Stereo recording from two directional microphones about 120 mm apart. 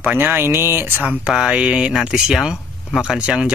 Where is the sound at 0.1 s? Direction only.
15° right (ahead or behind).